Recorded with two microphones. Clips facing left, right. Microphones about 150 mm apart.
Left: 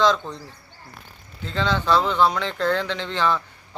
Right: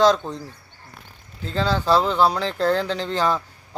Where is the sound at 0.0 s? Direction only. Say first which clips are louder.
Right 3 dB; 40° right (ahead or behind).